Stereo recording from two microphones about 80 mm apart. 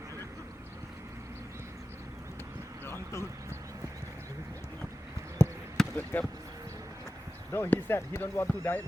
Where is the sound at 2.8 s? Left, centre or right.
Left.